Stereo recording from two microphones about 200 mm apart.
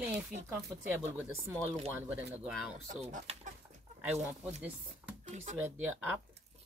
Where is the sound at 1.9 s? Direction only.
10° right (ahead or behind).